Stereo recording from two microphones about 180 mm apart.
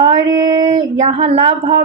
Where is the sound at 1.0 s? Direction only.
35° right (ahead or behind).